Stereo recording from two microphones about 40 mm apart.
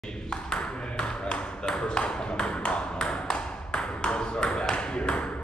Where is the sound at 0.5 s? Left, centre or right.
Left.